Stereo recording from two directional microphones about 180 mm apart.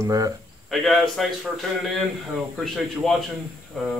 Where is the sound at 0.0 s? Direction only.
20° right (ahead or behind).